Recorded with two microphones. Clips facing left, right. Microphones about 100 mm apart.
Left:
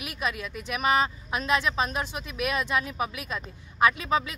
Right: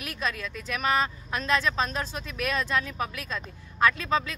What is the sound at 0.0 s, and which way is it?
A woman's voice, 15° left (ahead or behind).